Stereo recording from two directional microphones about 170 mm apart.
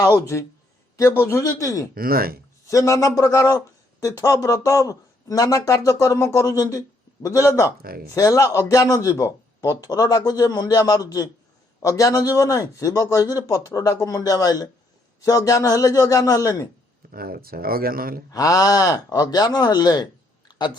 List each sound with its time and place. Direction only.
0.9 s speech: 15° left (ahead or behind)
2.0 s speech: 60° right (ahead or behind)
2.6 s speech: 20° left (ahead or behind)
7.8 s speech: 60° right (ahead or behind)
8.1 s speech: 20° left (ahead or behind)
17.1 s speech: 60° right (ahead or behind)
18.3 s speech: 20° left (ahead or behind)
20.5 s a sound: 25° left (ahead or behind)